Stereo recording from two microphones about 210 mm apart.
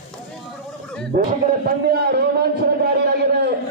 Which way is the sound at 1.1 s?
45° right (ahead or behind).